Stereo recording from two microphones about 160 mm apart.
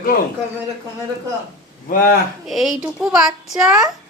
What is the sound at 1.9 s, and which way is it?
Speech, 65° left (ahead or behind).